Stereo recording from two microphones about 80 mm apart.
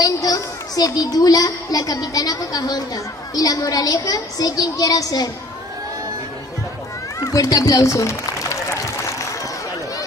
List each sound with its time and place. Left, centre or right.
0.0 s a child's voice: left
7.2 s speech: left